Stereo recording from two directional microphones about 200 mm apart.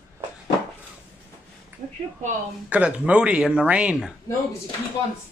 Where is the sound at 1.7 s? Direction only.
10° right (ahead or behind).